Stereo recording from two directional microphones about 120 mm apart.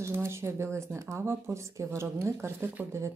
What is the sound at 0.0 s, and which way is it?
Speech, 20° right (ahead or behind).